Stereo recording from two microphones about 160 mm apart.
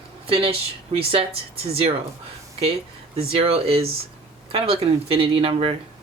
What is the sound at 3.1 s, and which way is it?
Speech, 40° right (ahead or behind).